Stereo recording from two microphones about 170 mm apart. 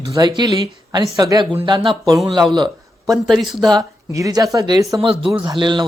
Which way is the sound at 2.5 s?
20° right (ahead or behind).